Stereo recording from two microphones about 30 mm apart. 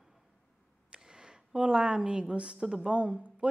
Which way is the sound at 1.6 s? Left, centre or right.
Right.